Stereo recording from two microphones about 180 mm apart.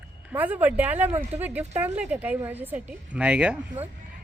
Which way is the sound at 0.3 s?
10° right (ahead or behind).